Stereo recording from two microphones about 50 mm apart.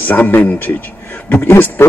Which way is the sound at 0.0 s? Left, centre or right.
Left.